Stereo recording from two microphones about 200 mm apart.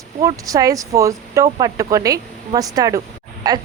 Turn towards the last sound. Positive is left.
turn(degrees=-20)  # may be behind; listen again after turning